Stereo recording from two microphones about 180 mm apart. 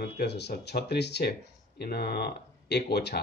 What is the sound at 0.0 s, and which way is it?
Speech, 65° left (ahead or behind).